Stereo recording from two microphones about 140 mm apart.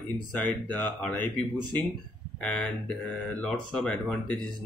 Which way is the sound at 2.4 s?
5° left (ahead or behind).